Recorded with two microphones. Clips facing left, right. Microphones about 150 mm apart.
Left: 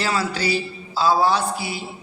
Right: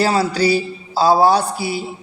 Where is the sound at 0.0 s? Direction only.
35° right (ahead or behind).